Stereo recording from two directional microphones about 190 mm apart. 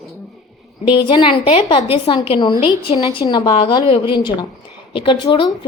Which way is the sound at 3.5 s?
30° left (ahead or behind).